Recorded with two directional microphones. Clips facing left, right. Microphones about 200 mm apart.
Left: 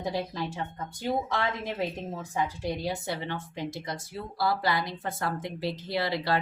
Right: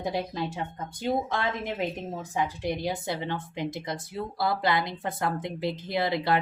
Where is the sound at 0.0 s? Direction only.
20° right (ahead or behind).